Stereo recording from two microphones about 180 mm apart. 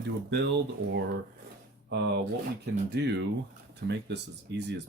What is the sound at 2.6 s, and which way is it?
Speech, 70° right (ahead or behind).